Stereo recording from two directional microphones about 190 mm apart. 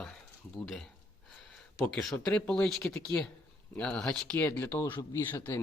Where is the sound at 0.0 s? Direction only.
Centre (ahead or behind).